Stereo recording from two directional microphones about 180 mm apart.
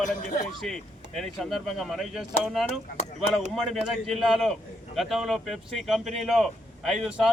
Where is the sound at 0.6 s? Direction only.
Centre (ahead or behind).